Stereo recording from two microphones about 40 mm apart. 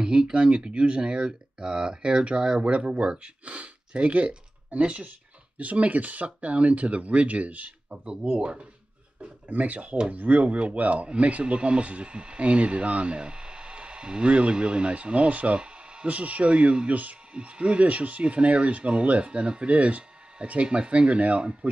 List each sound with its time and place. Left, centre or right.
0.0 s speech: right
7.9 s speech: right
9.2 s speech: right
16.1 s speech: right
16.9 s speech: right
17.3 s speech: right